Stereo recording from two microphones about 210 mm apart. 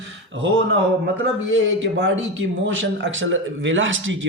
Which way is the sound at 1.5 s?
65° right (ahead or behind).